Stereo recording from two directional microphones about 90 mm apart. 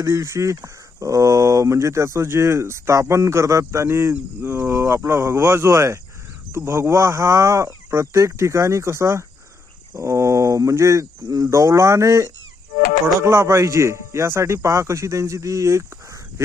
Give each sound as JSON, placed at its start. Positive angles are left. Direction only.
{"t": 0.0, "sound": "speech", "side_deg": -35}